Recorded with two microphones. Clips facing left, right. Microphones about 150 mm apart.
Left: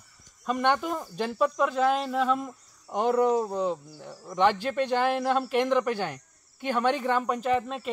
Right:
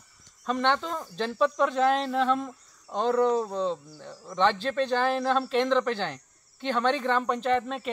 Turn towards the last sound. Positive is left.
turn(degrees=5)  # may be behind; listen again after turning